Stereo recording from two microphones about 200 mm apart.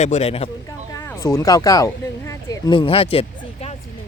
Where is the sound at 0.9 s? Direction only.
15° left (ahead or behind).